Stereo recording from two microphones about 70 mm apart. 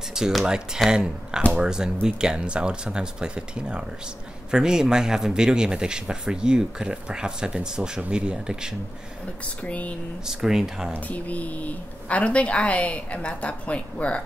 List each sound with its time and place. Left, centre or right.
0.1 s speech: centre
0.8 s speech: centre
9.4 s speech: centre
10.2 s speech: centre
10.9 s speech: left